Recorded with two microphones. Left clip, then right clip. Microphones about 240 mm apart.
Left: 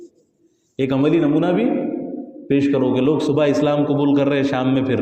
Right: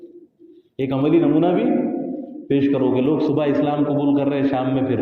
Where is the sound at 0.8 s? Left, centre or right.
Left.